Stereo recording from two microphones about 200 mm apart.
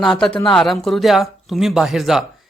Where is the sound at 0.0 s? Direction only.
Centre (ahead or behind).